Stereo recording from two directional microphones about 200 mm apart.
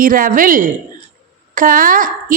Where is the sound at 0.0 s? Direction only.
45° right (ahead or behind).